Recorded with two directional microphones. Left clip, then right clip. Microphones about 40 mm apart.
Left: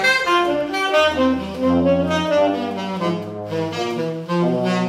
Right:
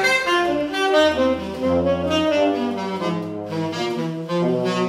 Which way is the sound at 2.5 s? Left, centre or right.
Left.